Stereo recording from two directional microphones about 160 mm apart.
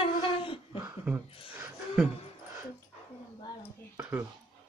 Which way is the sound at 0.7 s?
15° right (ahead or behind).